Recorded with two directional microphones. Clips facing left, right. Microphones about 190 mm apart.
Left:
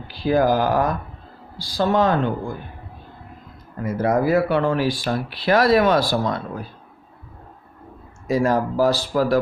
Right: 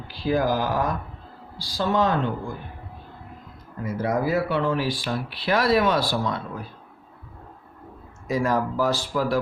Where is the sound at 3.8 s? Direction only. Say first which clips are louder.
Left 5 dB; 50° left (ahead or behind).